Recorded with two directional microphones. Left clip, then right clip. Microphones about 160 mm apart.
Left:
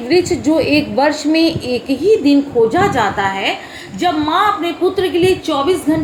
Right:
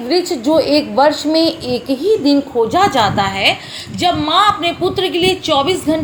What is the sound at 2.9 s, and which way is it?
A woman's voice, 35° right (ahead or behind).